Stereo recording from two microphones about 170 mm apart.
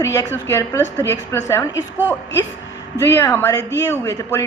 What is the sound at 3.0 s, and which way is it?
A woman's voice, 15° left (ahead or behind).